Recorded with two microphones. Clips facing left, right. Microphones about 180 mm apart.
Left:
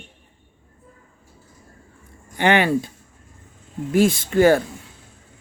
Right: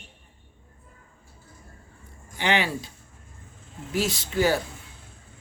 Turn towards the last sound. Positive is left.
turn(degrees=55)  # may be behind; listen again after turning